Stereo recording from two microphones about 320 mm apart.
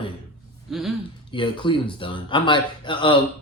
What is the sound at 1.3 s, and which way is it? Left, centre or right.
Speech, centre.